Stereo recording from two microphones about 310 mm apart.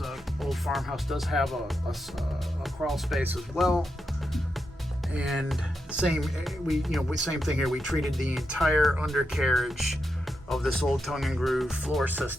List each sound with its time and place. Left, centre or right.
0.0 s speech: centre
5.1 s speech: centre